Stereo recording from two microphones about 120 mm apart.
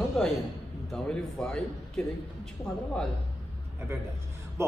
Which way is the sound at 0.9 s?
5° left (ahead or behind).